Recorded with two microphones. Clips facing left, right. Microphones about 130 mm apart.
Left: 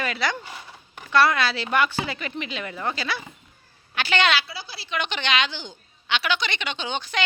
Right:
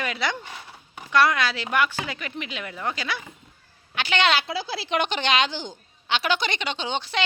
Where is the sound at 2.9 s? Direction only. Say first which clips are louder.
Left 1 dB; 15° right (ahead or behind).